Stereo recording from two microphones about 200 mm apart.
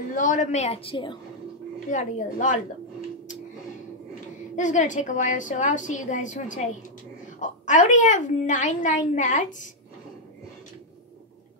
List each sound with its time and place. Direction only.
0.1 s a woman's voice: 40° left (ahead or behind)
1.9 s a woman's voice: 40° left (ahead or behind)
4.6 s a woman's voice: 40° left (ahead or behind)